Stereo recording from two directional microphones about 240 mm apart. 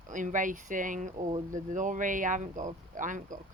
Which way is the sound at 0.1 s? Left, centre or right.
Right.